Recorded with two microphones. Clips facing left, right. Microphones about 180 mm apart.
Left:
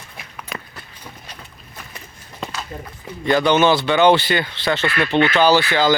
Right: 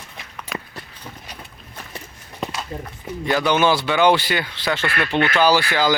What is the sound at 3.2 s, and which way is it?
Speech, 5° right (ahead or behind).